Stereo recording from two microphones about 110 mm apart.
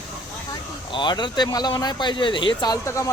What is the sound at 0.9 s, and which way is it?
Speech, 45° left (ahead or behind).